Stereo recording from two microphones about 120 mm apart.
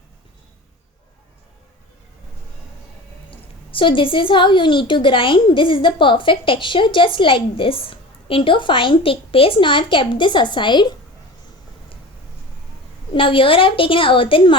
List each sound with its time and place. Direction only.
3.2 s a woman's voice: 45° left (ahead or behind)
13.1 s a woman's voice: 45° left (ahead or behind)